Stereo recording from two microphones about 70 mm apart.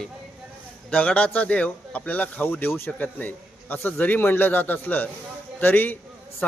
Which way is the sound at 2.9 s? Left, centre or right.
Left.